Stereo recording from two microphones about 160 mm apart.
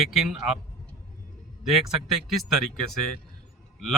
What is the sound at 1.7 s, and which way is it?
Speech, centre (ahead or behind).